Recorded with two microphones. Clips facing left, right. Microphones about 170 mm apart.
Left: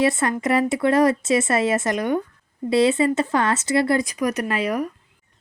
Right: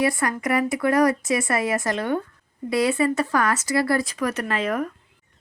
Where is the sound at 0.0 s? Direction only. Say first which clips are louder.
Left 3 dB; 25° left (ahead or behind).